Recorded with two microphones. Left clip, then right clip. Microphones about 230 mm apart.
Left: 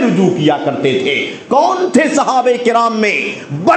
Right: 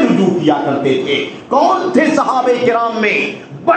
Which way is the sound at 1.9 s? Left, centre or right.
Left.